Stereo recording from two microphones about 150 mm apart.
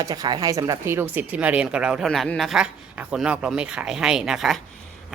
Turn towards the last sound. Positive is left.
turn(degrees=0)  # may be behind; listen again after turning